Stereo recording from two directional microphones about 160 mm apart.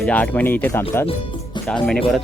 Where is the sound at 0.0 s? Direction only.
10° left (ahead or behind).